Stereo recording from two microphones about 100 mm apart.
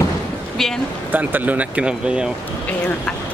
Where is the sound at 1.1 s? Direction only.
15° right (ahead or behind).